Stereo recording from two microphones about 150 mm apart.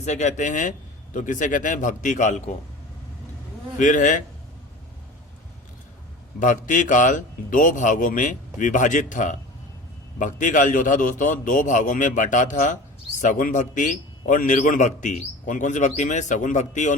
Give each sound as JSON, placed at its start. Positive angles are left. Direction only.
{"t": 0.0, "sound": "a man's voice", "side_deg": 50}
{"t": 3.8, "sound": "a man's voice", "side_deg": 60}
{"t": 6.4, "sound": "a man's voice", "side_deg": 60}